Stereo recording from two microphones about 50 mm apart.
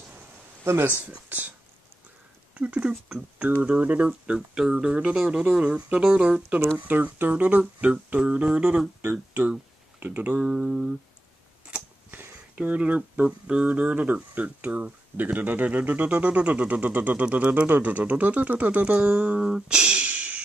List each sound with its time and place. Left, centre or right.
1.0 s speech: right
2.5 s speech: right
6.9 s speech: right; by 8.8 s centre
9.1 s speech: right
10.4 s a sound: centre
12.5 s speech: right
18.9 s speech: right
20.1 s music: right